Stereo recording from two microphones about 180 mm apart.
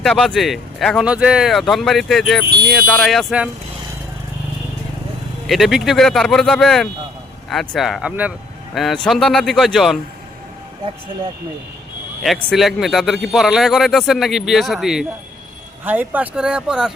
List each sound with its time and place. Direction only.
0.0 s speech: 5° left (ahead or behind)
5.5 s speech: centre (ahead or behind)
12.2 s speech: centre (ahead or behind)